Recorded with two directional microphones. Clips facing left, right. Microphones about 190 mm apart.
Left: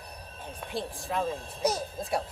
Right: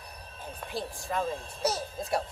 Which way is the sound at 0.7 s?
Centre (ahead or behind).